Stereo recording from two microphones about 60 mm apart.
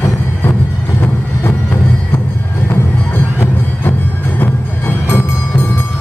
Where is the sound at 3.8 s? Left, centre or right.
Left.